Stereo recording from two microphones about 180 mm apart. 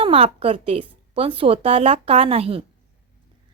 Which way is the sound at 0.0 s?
35° right (ahead or behind).